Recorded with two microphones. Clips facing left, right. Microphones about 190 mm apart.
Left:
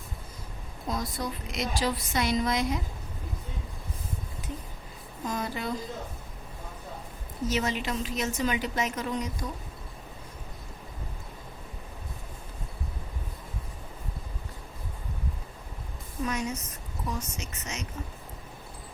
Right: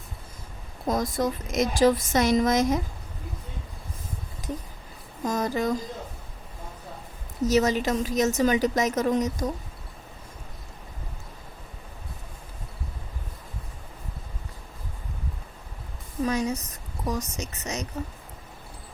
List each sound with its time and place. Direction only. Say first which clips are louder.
0.9 s a woman's voice: right 7 dB; 45° right (ahead or behind)
5.2 s a woman's voice: right 7 dB; 40° right (ahead or behind)
7.4 s a woman's voice: right 7 dB; 40° right (ahead or behind)
16.2 s a woman's voice: right 5 dB; 35° right (ahead or behind)